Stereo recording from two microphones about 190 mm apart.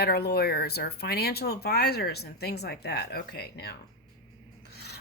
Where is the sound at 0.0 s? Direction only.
55° left (ahead or behind).